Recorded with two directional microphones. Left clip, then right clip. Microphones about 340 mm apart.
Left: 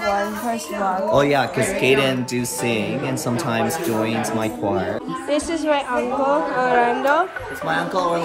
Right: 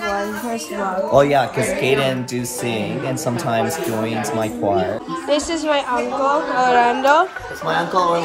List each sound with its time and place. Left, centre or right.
1.1 s a woman's voice: centre